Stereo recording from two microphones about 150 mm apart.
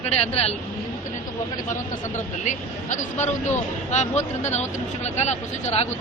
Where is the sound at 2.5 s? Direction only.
55° left (ahead or behind).